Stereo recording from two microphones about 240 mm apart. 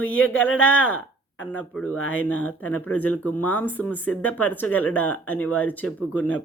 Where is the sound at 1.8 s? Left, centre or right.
Left.